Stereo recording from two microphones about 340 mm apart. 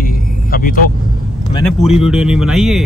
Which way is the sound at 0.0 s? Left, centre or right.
Left.